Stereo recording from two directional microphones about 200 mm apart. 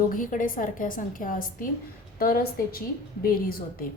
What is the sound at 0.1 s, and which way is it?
A woman's voice, 40° left (ahead or behind).